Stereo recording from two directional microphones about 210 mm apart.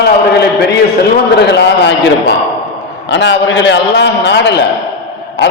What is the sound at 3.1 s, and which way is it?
A man's voice, 60° left (ahead or behind).